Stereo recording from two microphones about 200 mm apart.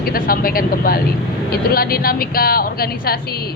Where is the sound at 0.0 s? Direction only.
45° left (ahead or behind).